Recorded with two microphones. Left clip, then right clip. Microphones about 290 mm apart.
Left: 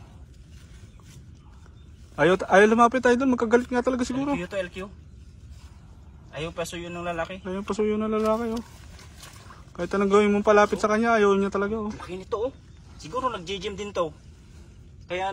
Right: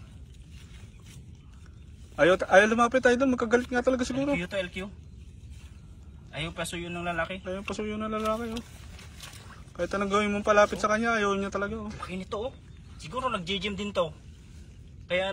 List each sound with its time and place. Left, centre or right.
2.1 s speech: left
4.4 s speech: centre
6.4 s speech: centre
9.8 s speech: left